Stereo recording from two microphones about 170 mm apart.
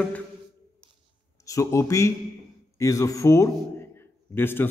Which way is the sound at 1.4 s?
20° left (ahead or behind).